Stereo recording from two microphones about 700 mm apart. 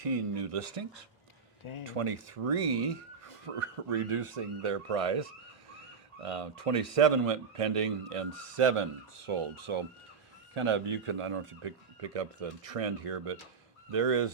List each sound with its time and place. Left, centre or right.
0.1 s speech: right
1.9 s speech: right
6.2 s speech: right